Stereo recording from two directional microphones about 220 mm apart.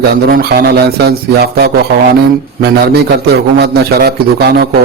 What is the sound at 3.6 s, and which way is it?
Speech, 45° right (ahead or behind).